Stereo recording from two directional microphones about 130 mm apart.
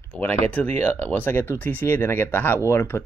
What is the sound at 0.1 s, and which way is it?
Speech, 10° left (ahead or behind).